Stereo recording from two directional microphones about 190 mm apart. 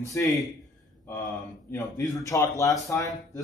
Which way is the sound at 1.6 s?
10° left (ahead or behind).